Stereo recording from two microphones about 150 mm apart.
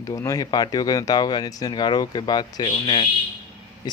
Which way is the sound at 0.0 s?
20° left (ahead or behind).